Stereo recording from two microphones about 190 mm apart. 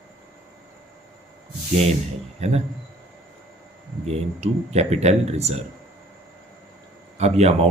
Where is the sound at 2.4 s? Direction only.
35° right (ahead or behind).